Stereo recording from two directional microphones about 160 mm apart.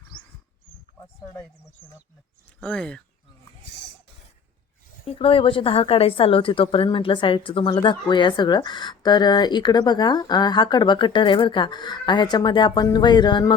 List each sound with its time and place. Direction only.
2.6 s speech: 5° left (ahead or behind)
5.0 s a woman's voice: 35° left (ahead or behind)